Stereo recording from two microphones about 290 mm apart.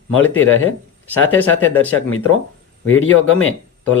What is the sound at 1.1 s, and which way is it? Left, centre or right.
Speech, centre.